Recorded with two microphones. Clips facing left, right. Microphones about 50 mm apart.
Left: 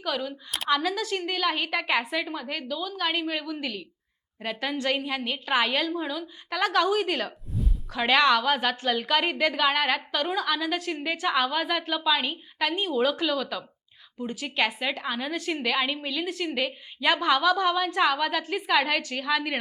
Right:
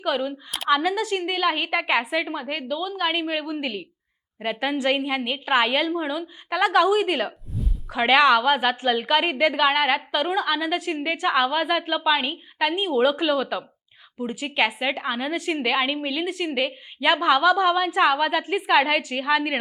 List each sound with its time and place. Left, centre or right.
0.0 s a woman's voice: centre
7.5 s a sound: centre
7.9 s a woman's voice: centre